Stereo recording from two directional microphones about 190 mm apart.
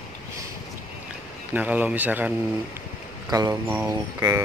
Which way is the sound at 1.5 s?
5° right (ahead or behind).